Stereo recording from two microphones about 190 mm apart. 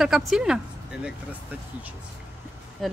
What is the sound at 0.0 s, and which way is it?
Speech, centre (ahead or behind).